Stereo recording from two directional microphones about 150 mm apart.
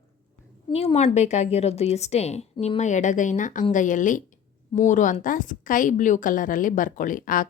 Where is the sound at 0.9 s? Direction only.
50° left (ahead or behind).